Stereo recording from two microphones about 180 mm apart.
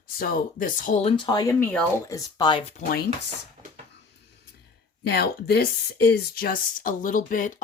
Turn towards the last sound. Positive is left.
turn(degrees=45)  # may be behind; listen again after turning